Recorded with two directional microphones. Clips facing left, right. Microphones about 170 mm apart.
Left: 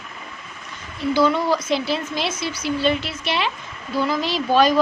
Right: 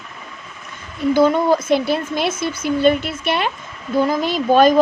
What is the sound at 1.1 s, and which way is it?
Speech, 50° right (ahead or behind).